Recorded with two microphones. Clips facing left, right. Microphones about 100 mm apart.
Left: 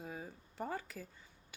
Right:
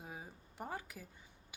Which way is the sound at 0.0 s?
15° right (ahead or behind).